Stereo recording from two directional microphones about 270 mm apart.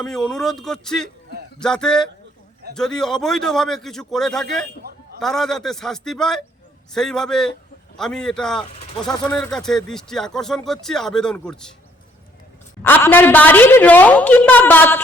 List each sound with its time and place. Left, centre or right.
0.0 s speech: centre
4.8 s a sound: right
5.2 s speech: centre
12.8 s a woman's voice: centre